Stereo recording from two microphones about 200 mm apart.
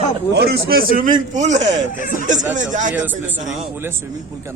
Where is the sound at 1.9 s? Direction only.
45° left (ahead or behind).